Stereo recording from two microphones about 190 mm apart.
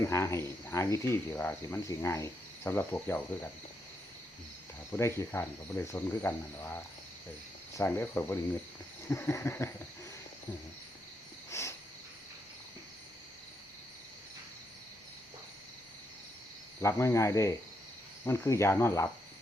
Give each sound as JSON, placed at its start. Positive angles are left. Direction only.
{"t": 0.0, "sound": "speech", "side_deg": 15}
{"t": 4.9, "sound": "speech", "side_deg": 15}
{"t": 7.8, "sound": "speech", "side_deg": 10}
{"t": 11.5, "sound": "cricket", "side_deg": 15}
{"t": 16.8, "sound": "speech", "side_deg": 15}